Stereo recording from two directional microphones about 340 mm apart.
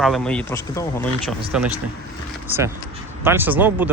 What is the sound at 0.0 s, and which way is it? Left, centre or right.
Speech, centre.